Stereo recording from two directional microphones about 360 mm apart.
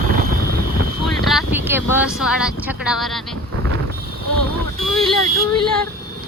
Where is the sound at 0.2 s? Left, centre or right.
Right.